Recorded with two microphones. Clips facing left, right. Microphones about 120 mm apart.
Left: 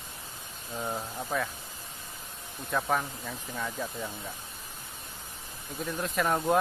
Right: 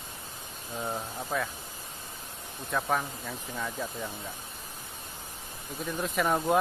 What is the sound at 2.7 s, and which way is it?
Speech, centre (ahead or behind).